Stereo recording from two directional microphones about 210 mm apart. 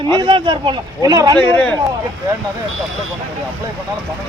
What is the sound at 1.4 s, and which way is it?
Speech, 5° left (ahead or behind).